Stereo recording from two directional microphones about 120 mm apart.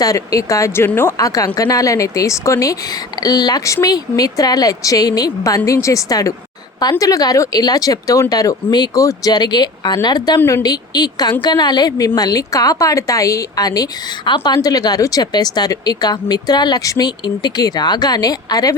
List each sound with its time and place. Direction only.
0.0 s a woman's voice: 30° left (ahead or behind)
1.5 s a woman's voice: 30° left (ahead or behind)